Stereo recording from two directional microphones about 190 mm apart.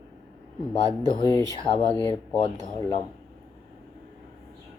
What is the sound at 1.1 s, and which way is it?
Speech, 20° left (ahead or behind).